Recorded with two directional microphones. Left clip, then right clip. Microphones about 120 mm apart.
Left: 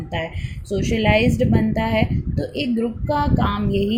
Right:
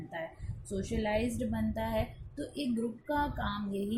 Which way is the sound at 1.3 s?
30° left (ahead or behind).